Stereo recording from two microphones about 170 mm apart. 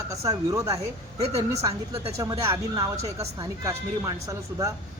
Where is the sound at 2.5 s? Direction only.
15° right (ahead or behind).